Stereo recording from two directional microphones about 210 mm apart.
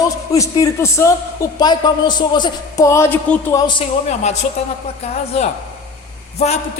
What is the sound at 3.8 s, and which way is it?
A woman's voice, 30° left (ahead or behind).